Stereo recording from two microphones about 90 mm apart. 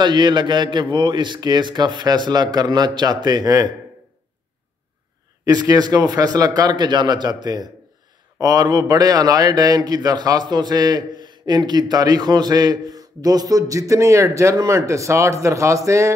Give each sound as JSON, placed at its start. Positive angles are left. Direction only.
{"t": 0.0, "sound": "a man's voice", "side_deg": -55}
{"t": 5.4, "sound": "a man's voice", "side_deg": -45}